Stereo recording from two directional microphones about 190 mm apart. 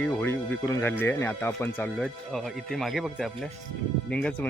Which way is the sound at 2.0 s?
Centre (ahead or behind).